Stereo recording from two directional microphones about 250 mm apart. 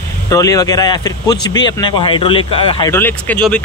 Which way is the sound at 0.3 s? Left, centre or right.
Centre.